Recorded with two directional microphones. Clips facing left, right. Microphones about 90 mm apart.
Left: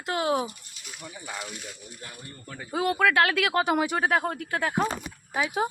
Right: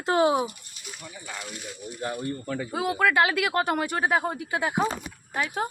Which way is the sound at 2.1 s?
90° right.